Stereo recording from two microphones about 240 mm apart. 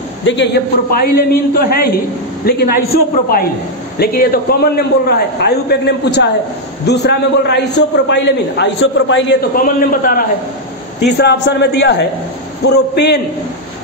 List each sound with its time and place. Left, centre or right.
0.2 s a man's voice: left
9.6 s a man's voice: left